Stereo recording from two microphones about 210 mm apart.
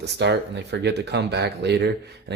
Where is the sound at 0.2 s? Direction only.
55° right (ahead or behind).